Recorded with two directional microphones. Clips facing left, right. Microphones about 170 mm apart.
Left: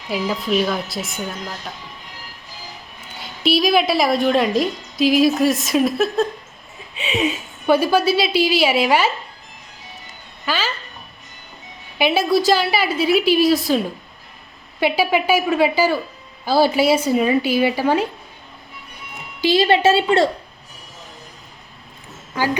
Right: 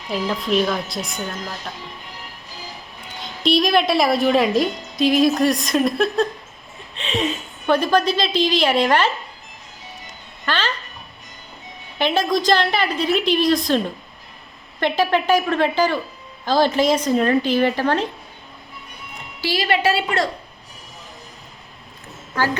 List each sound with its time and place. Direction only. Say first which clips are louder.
0.1 s a woman's voice: even; 5° left (ahead or behind)
3.2 s a woman's voice: even; 5° left (ahead or behind)
10.4 s a woman's voice: even; 5° left (ahead or behind)
11.9 s a woman's voice: left 2 dB; 10° left (ahead or behind)
19.4 s a woman's voice: left 5 dB; 25° left (ahead or behind)